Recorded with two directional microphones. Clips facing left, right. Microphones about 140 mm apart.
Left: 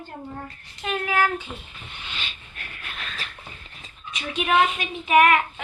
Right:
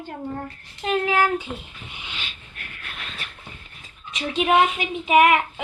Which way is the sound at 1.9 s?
15° right (ahead or behind).